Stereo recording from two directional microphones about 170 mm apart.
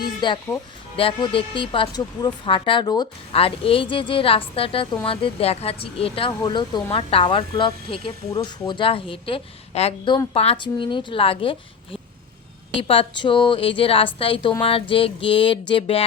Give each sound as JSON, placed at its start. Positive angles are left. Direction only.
{"t": 0.2, "sound": "speech", "side_deg": 25}